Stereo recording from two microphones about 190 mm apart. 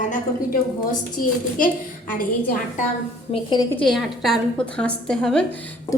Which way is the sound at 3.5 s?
20° left (ahead or behind).